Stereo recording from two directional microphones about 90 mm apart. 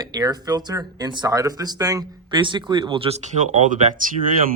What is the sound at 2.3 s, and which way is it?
Speech, 60° right (ahead or behind).